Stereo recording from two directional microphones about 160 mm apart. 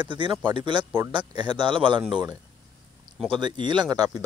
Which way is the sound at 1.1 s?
30° right (ahead or behind).